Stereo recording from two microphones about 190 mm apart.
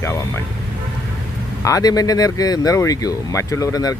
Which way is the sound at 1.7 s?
20° left (ahead or behind).